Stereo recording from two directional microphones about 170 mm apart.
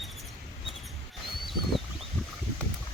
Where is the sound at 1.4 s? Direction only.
Centre (ahead or behind).